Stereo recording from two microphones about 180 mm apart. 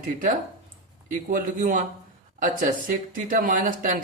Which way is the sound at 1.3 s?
50° right (ahead or behind).